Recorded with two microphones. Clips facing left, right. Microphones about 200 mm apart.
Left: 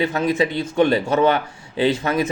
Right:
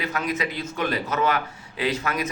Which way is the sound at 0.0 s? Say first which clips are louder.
Left 8 dB; 25° left (ahead or behind).